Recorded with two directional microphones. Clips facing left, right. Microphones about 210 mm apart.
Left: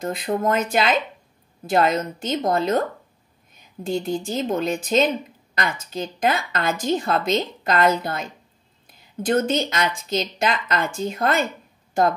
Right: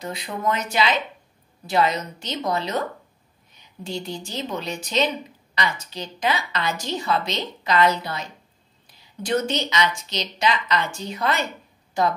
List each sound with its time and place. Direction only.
0.0 s a woman's voice: 50° left (ahead or behind)